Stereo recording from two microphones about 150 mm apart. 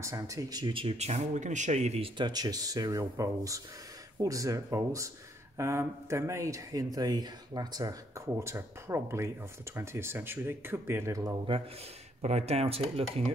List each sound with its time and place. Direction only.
0.0 s speech: 20° right (ahead or behind); by 2.0 s 45° right (ahead or behind)
2.1 s speech: 30° right (ahead or behind)
12.2 s speech: 45° right (ahead or behind)